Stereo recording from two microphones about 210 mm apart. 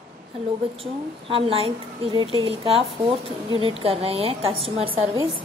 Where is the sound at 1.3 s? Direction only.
25° right (ahead or behind).